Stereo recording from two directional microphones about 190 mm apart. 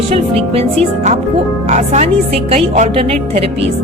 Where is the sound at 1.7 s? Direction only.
35° right (ahead or behind).